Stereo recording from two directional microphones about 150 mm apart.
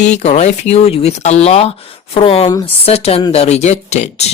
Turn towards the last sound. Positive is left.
turn(degrees=50)  # may be behind; listen again after turning